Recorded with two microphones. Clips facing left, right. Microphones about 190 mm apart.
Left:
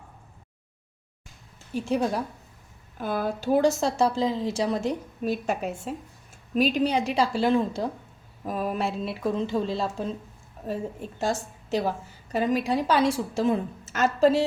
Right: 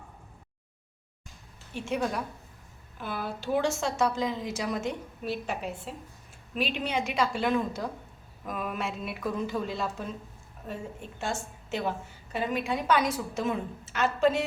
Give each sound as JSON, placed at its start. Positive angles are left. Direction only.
{"t": 1.7, "sound": "a woman's voice", "side_deg": 35}
{"t": 3.0, "sound": "a woman's voice", "side_deg": 45}